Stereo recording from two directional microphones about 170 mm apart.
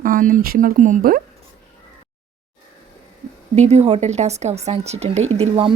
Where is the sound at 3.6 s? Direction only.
40° right (ahead or behind).